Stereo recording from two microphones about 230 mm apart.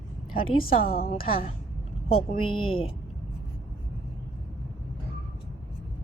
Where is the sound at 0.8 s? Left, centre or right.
Left.